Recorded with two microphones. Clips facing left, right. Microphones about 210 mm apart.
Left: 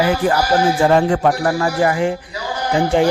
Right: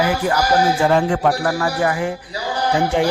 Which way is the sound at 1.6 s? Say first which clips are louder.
Left 3 dB; 30° left (ahead or behind).